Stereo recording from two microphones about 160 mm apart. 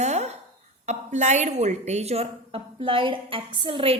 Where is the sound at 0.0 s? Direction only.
45° right (ahead or behind).